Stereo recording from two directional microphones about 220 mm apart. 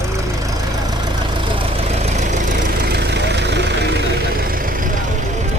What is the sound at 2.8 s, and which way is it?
Vehicle, 45° right (ahead or behind).